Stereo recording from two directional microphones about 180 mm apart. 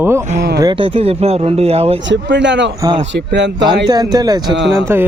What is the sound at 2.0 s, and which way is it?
Speech, 85° right.